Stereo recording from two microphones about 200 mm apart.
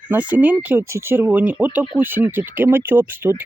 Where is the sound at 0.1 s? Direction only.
10° right (ahead or behind).